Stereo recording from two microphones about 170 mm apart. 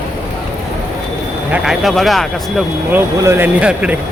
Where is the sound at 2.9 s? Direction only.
15° right (ahead or behind).